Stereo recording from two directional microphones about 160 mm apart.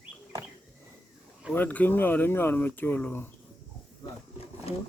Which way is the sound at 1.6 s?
10° left (ahead or behind).